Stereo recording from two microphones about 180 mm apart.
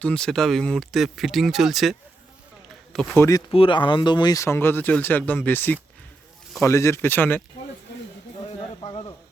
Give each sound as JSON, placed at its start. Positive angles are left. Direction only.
{"t": 0.0, "sound": "speech", "side_deg": 5}
{"t": 3.2, "sound": "speech", "side_deg": 20}
{"t": 3.5, "sound": "speech", "side_deg": 30}
{"t": 8.8, "sound": "a sound", "side_deg": 30}